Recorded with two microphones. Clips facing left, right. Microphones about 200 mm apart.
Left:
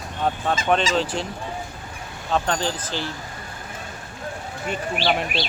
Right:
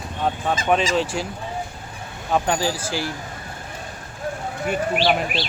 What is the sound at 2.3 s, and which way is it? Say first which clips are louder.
Speech: right 2 dB; 10° right (ahead or behind).